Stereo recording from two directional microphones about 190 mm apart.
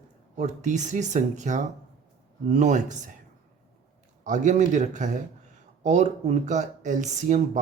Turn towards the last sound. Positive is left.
turn(degrees=-40)  # may be behind; listen again after turning